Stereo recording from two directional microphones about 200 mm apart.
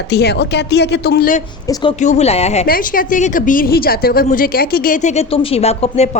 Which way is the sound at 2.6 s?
45° left (ahead or behind).